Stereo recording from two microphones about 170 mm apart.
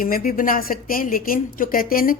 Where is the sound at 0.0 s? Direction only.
55° left (ahead or behind).